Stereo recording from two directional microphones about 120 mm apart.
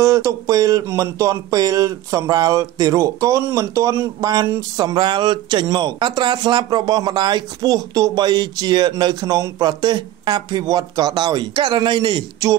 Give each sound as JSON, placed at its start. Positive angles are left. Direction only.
{"t": 0.0, "sound": "speech", "side_deg": -25}